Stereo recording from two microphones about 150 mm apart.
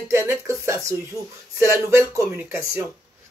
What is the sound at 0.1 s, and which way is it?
A man's voice, 20° right (ahead or behind).